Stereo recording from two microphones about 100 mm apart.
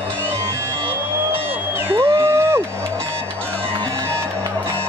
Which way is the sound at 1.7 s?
25° right (ahead or behind).